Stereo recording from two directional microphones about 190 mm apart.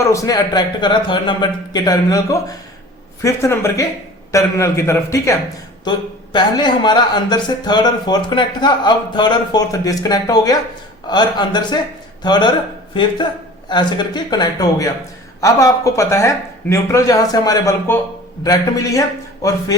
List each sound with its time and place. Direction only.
0.0 s speech: 15° left (ahead or behind)